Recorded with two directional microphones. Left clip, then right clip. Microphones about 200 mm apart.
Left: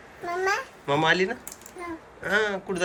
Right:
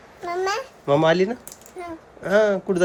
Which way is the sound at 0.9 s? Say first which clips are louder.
Right 4 dB; 40° right (ahead or behind).